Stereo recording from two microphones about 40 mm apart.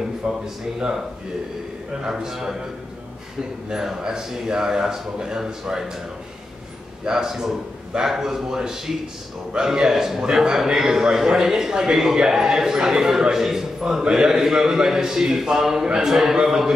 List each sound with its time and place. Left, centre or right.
2.0 s a man's voice: centre
3.7 s a man's voice: centre
7.1 s a man's voice: centre